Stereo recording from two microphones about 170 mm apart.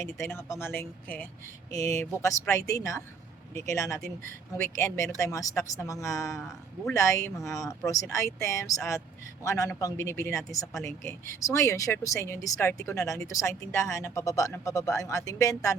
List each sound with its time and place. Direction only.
0.0 s speech: 15° left (ahead or behind)